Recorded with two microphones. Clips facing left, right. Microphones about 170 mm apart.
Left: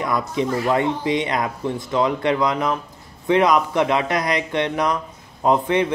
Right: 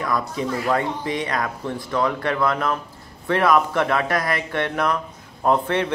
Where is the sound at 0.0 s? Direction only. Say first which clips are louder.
Left 2 dB; 20° left (ahead or behind).